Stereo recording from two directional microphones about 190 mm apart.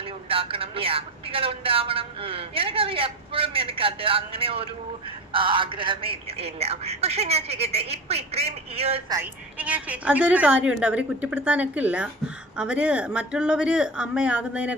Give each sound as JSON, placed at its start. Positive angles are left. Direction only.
{"t": 0.3, "sound": "a man's voice", "side_deg": -30}
{"t": 9.1, "sound": "a woman's voice", "side_deg": -10}